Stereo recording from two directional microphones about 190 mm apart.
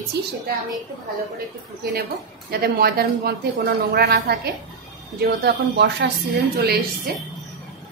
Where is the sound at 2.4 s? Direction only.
55° right (ahead or behind).